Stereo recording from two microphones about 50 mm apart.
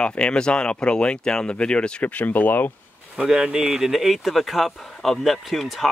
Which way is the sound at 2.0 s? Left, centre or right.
Left.